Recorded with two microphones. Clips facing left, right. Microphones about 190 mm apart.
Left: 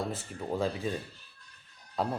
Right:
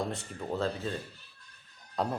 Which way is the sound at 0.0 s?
5° left (ahead or behind).